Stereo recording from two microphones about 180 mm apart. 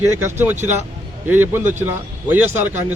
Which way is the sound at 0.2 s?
10° right (ahead or behind).